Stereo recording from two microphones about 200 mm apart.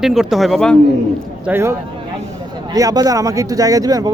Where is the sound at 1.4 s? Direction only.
10° right (ahead or behind).